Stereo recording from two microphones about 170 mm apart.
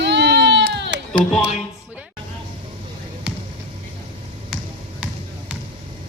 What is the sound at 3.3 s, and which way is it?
Basketball bounce, 5° right (ahead or behind).